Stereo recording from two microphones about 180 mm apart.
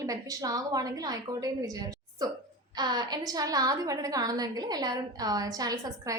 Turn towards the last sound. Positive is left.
turn(degrees=-20)  # may be behind; listen again after turning